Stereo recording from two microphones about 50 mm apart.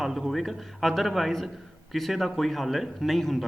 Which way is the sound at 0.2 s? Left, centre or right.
Centre.